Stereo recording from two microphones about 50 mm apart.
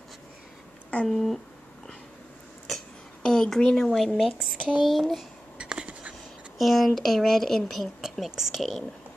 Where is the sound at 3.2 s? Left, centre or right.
Centre.